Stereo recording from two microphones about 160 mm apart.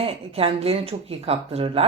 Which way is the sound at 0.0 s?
35° right (ahead or behind).